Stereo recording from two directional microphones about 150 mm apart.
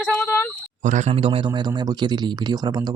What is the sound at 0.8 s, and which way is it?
Speech, 50° right (ahead or behind).